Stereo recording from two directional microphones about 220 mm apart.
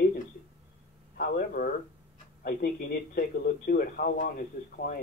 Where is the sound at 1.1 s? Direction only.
40° left (ahead or behind).